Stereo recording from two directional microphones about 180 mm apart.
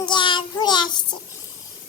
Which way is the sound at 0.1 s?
25° left (ahead or behind).